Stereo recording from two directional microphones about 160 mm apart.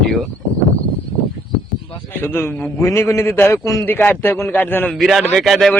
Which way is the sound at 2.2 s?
15° left (ahead or behind).